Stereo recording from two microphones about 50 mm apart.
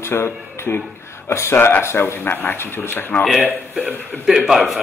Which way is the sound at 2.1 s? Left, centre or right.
Left.